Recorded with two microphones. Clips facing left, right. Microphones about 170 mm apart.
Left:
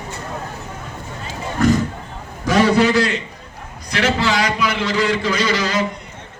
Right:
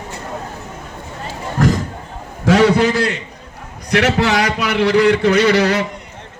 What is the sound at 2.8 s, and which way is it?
Speech, 55° right (ahead or behind).